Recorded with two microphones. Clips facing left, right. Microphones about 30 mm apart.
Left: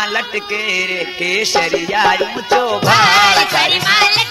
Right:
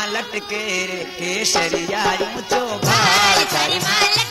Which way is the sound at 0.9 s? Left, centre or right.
Left.